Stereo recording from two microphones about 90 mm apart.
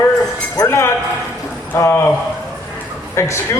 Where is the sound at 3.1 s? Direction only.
30° left (ahead or behind).